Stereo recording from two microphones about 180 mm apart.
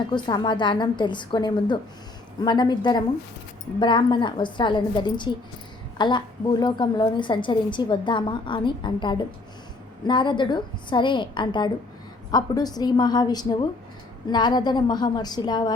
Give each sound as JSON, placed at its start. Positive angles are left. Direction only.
{"t": 0.1, "sound": "a woman's voice", "side_deg": 25}